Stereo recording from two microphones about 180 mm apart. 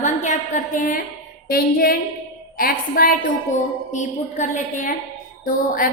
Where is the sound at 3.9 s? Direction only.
40° left (ahead or behind).